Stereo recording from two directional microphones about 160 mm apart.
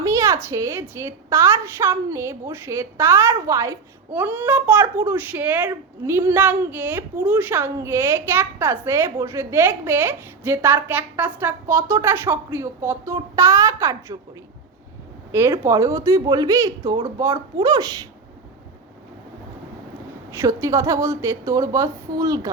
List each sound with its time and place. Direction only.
0.0 s a sound: 20° right (ahead or behind)
0.4 s a woman's voice: 15° right (ahead or behind)
15.3 s speech: 15° right (ahead or behind)
20.3 s speech: 20° right (ahead or behind)